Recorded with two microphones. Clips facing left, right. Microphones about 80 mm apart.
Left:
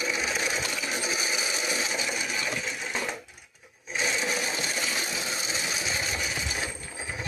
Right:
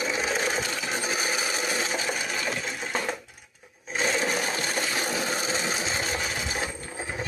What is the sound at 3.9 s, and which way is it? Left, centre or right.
Toilet flush, right.